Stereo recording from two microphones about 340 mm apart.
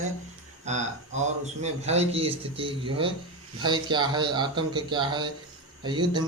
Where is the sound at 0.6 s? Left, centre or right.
Centre.